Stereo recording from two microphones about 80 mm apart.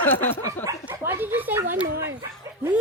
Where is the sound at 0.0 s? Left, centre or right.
Left.